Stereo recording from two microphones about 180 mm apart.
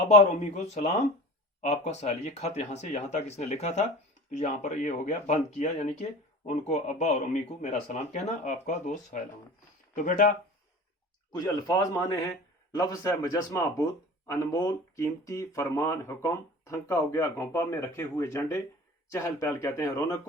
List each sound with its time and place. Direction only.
0.1 s speech: 40° left (ahead or behind)
11.3 s speech: 20° left (ahead or behind)